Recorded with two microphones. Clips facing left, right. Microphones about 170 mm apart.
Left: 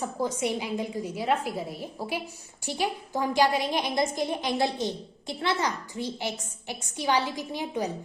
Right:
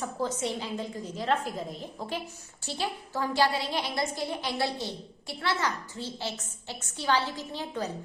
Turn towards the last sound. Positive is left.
turn(degrees=15)  # may be behind; listen again after turning